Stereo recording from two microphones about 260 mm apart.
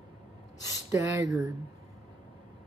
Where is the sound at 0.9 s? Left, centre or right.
Centre.